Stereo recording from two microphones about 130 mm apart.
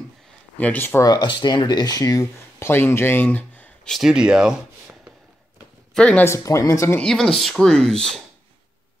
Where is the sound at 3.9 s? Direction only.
5° right (ahead or behind).